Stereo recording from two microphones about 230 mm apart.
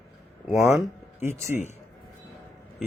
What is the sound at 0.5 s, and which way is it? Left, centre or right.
Speech, centre.